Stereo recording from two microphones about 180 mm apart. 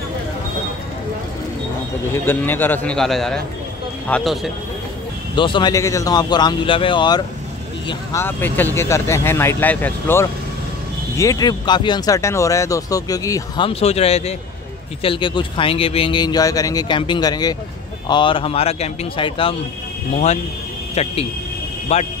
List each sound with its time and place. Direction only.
2.1 s speech: 10° left (ahead or behind)
5.3 s speech: 25° left (ahead or behind)
8.1 s speech: 15° left (ahead or behind)
13.7 s speech: 35° left (ahead or behind)
20.9 s speech: 35° left (ahead or behind)